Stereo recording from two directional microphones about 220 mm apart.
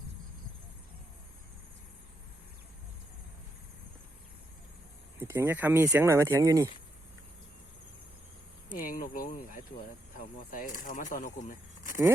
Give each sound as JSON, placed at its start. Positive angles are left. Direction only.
{"t": 5.2, "sound": "speech", "side_deg": -10}
{"t": 8.8, "sound": "speech", "side_deg": 40}